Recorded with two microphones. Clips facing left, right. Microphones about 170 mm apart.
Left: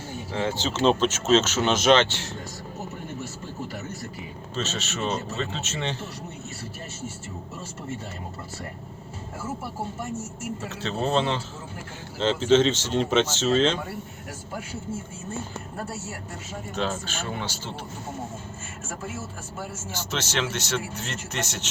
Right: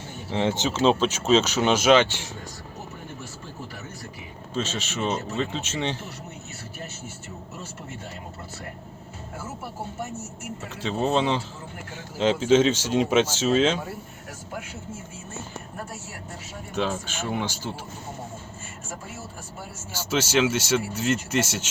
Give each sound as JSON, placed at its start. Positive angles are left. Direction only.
{"t": 0.3, "sound": "speech", "side_deg": -20}
{"t": 0.7, "sound": "speech", "side_deg": -10}
{"t": 4.5, "sound": "speech", "side_deg": -10}
{"t": 10.8, "sound": "speech", "side_deg": -10}
{"t": 16.7, "sound": "speech", "side_deg": -10}
{"t": 19.9, "sound": "speech", "side_deg": -10}